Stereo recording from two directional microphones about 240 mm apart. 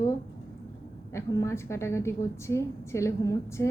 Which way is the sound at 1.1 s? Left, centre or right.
Centre.